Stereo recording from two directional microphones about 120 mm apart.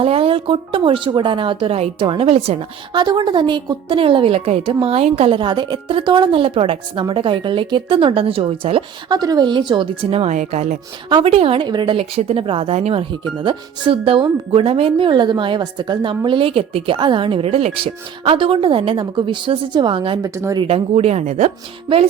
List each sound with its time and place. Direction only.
0.0 s speech: 55° right (ahead or behind)
2.9 s speech: 40° right (ahead or behind)
9.1 s a woman's voice: 35° right (ahead or behind); by 10.3 s 55° right (ahead or behind)
10.3 s speech: 80° right
11.1 s speech: 50° right (ahead or behind)
12.1 s speech: 50° right (ahead or behind)
20.2 s speech: 25° right (ahead or behind)
20.6 s speech: 55° right (ahead or behind); by 21.5 s 70° right (ahead or behind)